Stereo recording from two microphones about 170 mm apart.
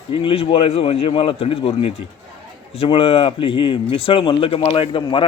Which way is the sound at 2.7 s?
35° left (ahead or behind).